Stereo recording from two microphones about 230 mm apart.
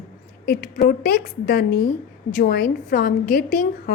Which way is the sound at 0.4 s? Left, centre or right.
Left.